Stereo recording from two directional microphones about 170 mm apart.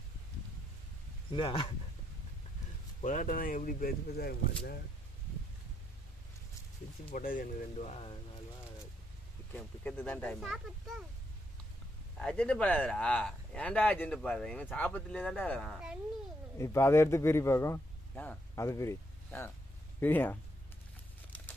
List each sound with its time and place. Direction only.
1.3 s speech: 30° left (ahead or behind)
3.0 s speech: 45° left (ahead or behind); by 4.6 s 65° left (ahead or behind)
7.1 s speech: 55° left (ahead or behind)
7.7 s speech: 35° left (ahead or behind)
9.5 s a child's voice: 10° left (ahead or behind)
12.2 s speech: 5° left (ahead or behind)
16.5 s a man's voice: 15° left (ahead or behind)